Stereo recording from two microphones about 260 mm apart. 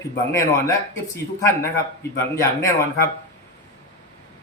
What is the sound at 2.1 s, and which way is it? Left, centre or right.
Speech, centre.